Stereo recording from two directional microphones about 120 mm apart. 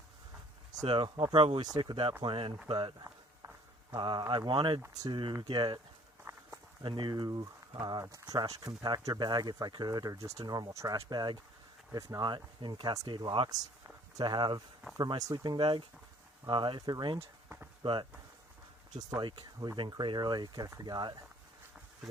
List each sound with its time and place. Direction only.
0.9 s speech: 45° right (ahead or behind)
1.6 s speech: 35° right (ahead or behind)
3.9 s speech: 40° right (ahead or behind)
6.3 s walk: 20° right (ahead or behind)
6.8 s speech: 40° right (ahead or behind)
13.8 s a sound: 35° right (ahead or behind)
14.9 s speech: 35° right (ahead or behind)
19.2 s speech: 35° right (ahead or behind)